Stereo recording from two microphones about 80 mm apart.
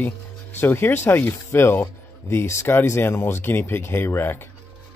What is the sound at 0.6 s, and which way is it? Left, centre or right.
Speech, left.